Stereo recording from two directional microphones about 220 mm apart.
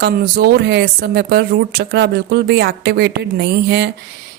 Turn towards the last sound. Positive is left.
turn(degrees=-50)  # may be behind; listen again after turning